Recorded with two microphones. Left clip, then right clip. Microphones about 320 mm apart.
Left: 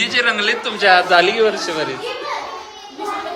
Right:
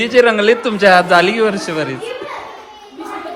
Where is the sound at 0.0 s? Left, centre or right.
Centre.